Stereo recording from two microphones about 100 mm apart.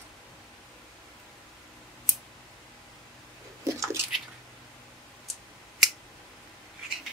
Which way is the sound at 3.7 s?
30° right (ahead or behind).